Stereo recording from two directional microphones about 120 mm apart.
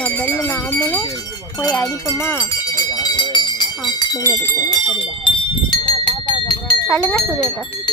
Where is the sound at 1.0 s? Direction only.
35° left (ahead or behind); by 2.5 s 15° left (ahead or behind).